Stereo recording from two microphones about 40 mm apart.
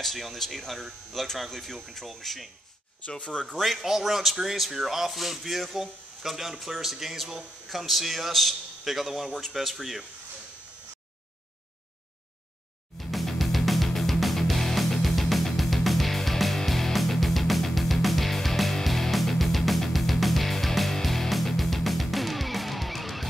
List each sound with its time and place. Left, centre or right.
0.0 s speech: centre
3.1 s speech: left
3.5 s speech: centre
13.1 s music: centre